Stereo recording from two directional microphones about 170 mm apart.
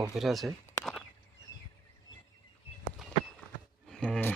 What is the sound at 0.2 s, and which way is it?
Speech, centre (ahead or behind).